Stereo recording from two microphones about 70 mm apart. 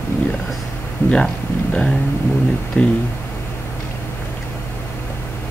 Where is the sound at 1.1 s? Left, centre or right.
Centre.